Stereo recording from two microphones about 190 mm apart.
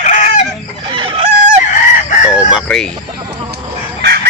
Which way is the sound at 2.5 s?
Centre (ahead or behind).